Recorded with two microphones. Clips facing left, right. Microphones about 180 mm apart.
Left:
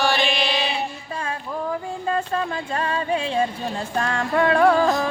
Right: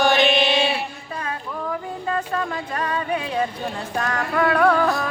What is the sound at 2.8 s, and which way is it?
Music, 30° left (ahead or behind).